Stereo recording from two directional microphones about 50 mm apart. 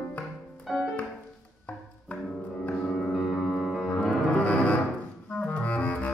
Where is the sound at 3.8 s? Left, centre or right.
Centre.